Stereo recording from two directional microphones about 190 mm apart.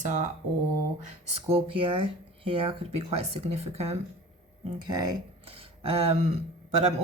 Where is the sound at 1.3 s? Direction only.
30° right (ahead or behind).